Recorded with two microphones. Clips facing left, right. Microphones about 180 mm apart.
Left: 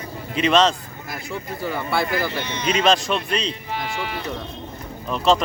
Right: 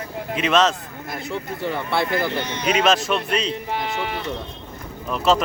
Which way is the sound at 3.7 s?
50° right (ahead or behind).